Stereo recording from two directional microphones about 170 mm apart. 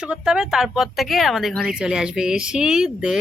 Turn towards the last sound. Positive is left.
turn(degrees=-5)  # may be behind; listen again after turning